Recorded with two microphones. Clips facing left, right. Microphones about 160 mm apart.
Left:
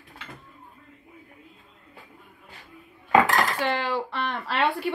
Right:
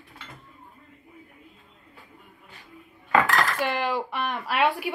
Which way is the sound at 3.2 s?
20° left (ahead or behind).